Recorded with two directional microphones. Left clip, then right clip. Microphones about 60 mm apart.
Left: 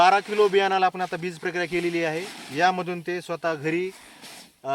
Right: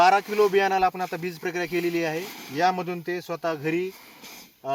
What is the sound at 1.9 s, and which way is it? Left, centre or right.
Speech, right.